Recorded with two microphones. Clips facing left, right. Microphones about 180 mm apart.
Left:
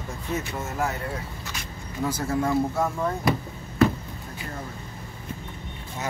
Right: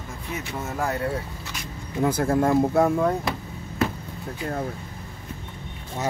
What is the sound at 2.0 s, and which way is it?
Speech, 55° right (ahead or behind).